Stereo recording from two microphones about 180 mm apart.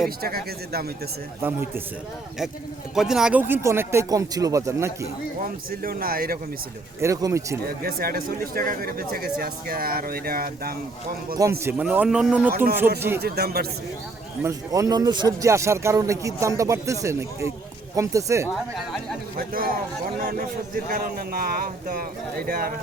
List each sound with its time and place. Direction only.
0.2 s speech: 55° right (ahead or behind)
2.9 s speech: centre (ahead or behind)
5.4 s a man's voice: 55° right (ahead or behind)
7.0 s speech: 20° right (ahead or behind)
7.6 s speech: 55° right (ahead or behind)
11.6 s speech: 10° right (ahead or behind)
12.5 s a man's voice: 55° right (ahead or behind)
14.4 s speech: 20° right (ahead or behind)
19.4 s a man's voice: 55° right (ahead or behind)